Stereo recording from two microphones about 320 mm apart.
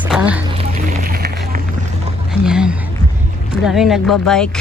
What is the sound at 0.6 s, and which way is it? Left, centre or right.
Run, right.